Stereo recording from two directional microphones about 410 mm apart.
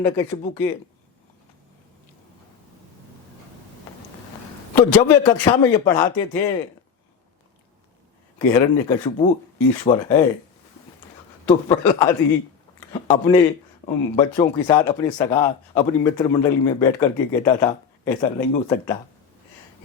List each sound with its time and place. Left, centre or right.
0.0 s speech: centre
4.7 s speech: centre
8.4 s speech: centre
11.4 s speech: centre